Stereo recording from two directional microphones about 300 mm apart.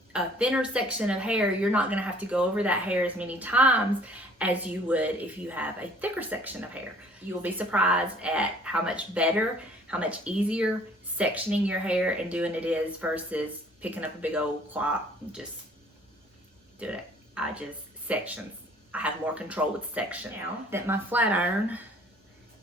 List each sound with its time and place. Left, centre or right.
0.1 s speech: centre
16.8 s speech: centre